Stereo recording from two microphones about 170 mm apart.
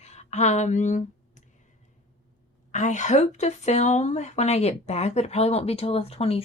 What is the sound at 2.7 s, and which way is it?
A woman's voice, 45° left (ahead or behind).